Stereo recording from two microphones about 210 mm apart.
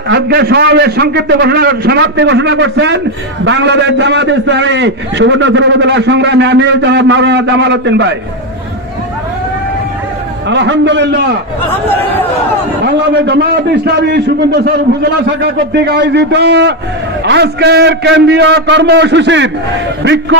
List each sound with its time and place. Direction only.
0.1 s a man's voice: 50° right (ahead or behind)
10.5 s a man's voice: 60° right (ahead or behind)
12.8 s a man's voice: 55° right (ahead or behind)